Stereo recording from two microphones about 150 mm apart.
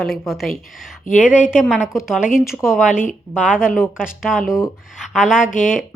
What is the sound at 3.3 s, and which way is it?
Speech, 5° right (ahead or behind).